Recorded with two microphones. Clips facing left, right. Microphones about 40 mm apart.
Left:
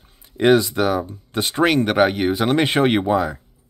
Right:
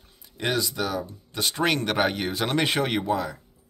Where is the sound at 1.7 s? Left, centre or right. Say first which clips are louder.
Left 7 dB; centre; by 3.3 s left.